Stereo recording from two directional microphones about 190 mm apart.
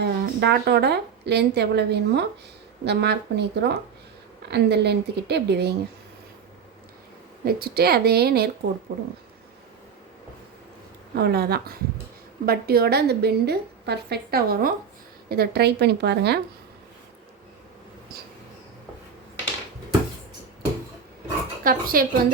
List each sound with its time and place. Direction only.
0.0 s a woman's voice: 55° right (ahead or behind)
7.4 s a woman's voice: 55° right (ahead or behind)
11.1 s a woman's voice: 55° right (ahead or behind)
21.6 s speech: 45° right (ahead or behind)